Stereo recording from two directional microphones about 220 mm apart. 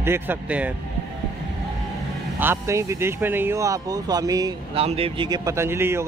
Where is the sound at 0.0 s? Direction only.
10° right (ahead or behind).